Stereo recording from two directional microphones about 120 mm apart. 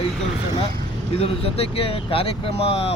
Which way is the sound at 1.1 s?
55° left (ahead or behind).